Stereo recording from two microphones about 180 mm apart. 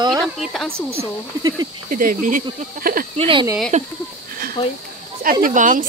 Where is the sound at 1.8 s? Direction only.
50° right (ahead or behind).